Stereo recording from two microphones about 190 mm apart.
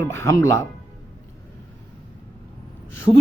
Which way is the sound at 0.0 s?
15° left (ahead or behind).